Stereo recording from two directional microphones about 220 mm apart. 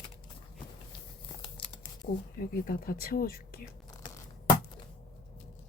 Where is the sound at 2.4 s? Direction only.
40° left (ahead or behind).